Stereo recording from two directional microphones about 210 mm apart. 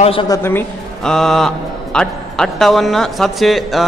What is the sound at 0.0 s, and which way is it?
Speech, 25° left (ahead or behind).